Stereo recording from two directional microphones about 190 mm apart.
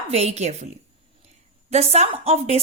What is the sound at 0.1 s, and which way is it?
Speech, 35° right (ahead or behind).